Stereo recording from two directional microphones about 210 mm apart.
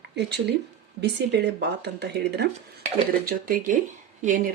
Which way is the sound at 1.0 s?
50° right (ahead or behind).